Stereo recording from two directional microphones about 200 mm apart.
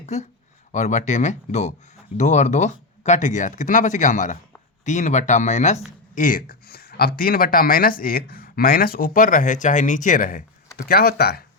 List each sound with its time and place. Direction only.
0.0 s speech: 35° left (ahead or behind); by 11.4 s 50° left (ahead or behind)